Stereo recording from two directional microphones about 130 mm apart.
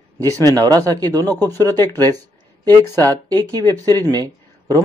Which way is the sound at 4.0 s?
30° right (ahead or behind).